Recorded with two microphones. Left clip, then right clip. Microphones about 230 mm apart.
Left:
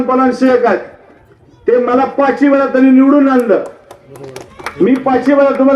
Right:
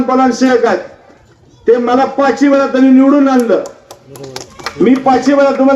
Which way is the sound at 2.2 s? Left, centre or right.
Right.